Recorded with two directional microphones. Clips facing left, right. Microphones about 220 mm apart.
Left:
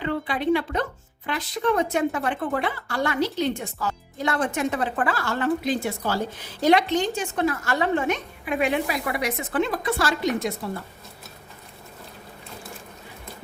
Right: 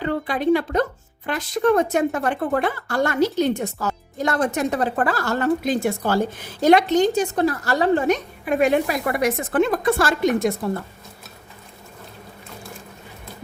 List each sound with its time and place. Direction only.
0.0 s a woman's voice: 40° right (ahead or behind)